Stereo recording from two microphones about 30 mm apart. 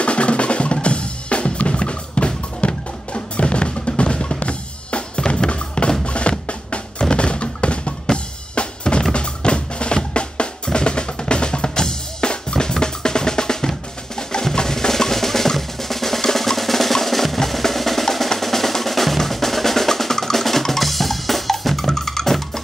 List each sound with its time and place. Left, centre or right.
0.0 s percussion: left
0.8 s drum kit: left
6.0 s drum: left
7.0 s music: left
8.1 s drum kit: left
9.1 s drum: left; by 16.2 s centre
16.3 s percussion: centre
18.4 s drum: centre